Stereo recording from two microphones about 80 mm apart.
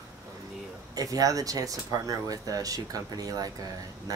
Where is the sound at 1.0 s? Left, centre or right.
Right.